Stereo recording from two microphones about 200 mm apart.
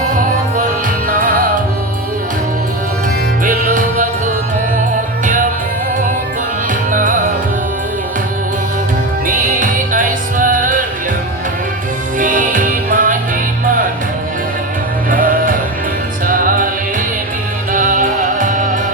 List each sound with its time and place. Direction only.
6.9 s music: 40° right (ahead or behind)
9.2 s music: 40° right (ahead or behind)
12.2 s music: 40° right (ahead or behind)
15.1 s music: 45° right (ahead or behind)
17.7 s music: 40° right (ahead or behind)